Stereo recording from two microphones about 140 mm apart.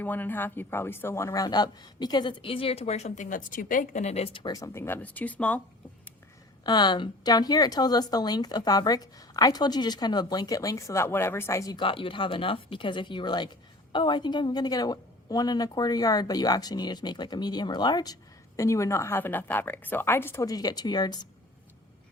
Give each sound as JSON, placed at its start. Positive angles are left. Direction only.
{"t": 0.0, "sound": "speech", "side_deg": 15}
{"t": 4.5, "sound": "speech", "side_deg": 20}
{"t": 6.7, "sound": "a woman's voice", "side_deg": 30}
{"t": 11.8, "sound": "a woman's voice", "side_deg": 40}